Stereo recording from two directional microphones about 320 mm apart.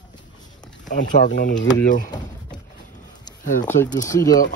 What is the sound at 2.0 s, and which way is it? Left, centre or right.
Door, centre.